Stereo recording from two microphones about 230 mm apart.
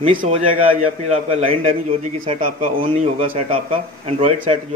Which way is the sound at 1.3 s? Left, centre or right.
Right.